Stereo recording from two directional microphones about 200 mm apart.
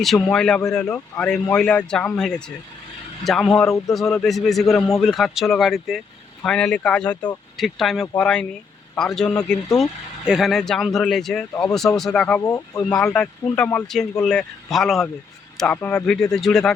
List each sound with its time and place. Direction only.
0.0 s speech: centre (ahead or behind)